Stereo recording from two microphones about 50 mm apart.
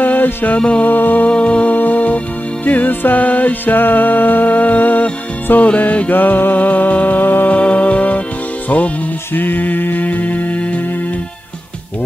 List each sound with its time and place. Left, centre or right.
0.0 s music: left
6.1 s music: left
7.5 s music: left